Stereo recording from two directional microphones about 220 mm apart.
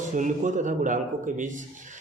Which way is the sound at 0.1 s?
35° right (ahead or behind).